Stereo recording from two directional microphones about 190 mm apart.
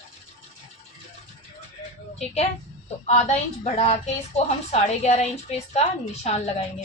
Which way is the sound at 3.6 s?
35° left (ahead or behind).